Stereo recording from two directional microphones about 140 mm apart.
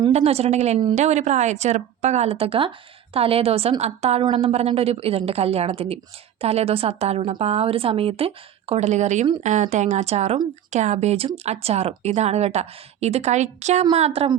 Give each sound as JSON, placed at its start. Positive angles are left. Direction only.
{"t": 0.1, "sound": "speech", "side_deg": -45}